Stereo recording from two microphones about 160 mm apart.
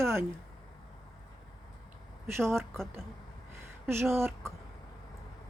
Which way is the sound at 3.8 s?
15° right (ahead or behind).